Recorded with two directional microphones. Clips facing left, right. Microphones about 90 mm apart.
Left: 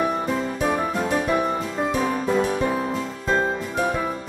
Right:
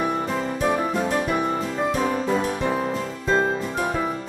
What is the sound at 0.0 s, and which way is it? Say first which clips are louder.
Music: left 1 dB; centre (ahead or behind).